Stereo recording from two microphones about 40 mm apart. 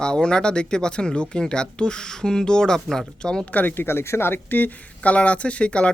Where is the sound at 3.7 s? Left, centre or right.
Left.